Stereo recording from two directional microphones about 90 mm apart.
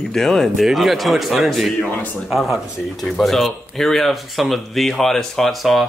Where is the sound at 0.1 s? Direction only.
5° left (ahead or behind).